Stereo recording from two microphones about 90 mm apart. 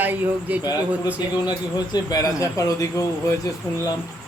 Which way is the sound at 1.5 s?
50° left (ahead or behind).